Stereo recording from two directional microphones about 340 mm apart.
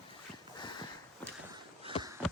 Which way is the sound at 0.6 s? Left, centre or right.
Centre.